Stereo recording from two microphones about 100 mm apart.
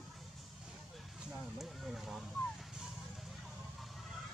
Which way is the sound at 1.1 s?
Centre (ahead or behind).